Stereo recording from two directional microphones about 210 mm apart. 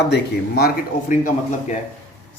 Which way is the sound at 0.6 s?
40° left (ahead or behind).